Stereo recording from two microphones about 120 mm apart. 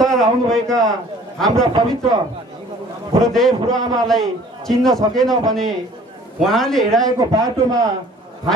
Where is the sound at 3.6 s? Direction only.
30° right (ahead or behind).